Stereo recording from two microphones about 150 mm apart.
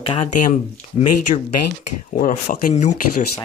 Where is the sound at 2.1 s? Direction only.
65° left (ahead or behind).